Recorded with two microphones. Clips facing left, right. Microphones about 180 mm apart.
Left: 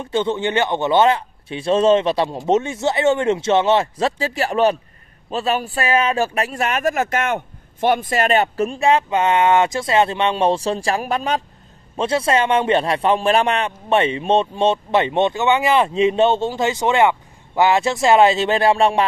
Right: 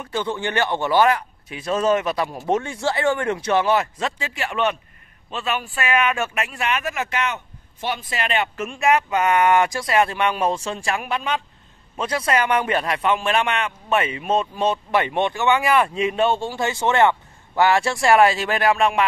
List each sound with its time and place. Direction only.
0.0 s a man's voice: 25° left (ahead or behind); by 11.4 s 40° left (ahead or behind)
12.0 s a man's voice: 25° left (ahead or behind)